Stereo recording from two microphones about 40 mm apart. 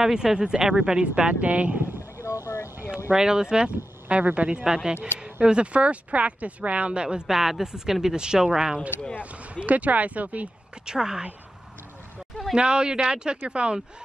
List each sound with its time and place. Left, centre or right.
0.0 s speech: centre
1.4 s speech: right
2.1 s a sound: right
3.1 s speech: centre
4.2 s speech: right
4.6 s speech: centre
7.2 s speech: centre
9.2 s speech: right
10.9 s speech: centre
12.5 s speech: right